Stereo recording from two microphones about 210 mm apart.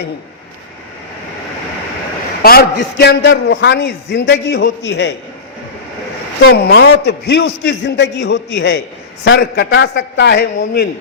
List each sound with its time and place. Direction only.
2.4 s a man's voice: 45° left (ahead or behind)
6.4 s a man's voice: 50° left (ahead or behind)